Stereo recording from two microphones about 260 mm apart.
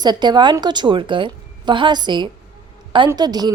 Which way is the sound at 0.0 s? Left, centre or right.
Centre.